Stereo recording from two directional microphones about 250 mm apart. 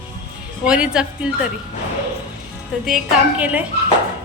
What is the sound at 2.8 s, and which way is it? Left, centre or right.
Speech, centre.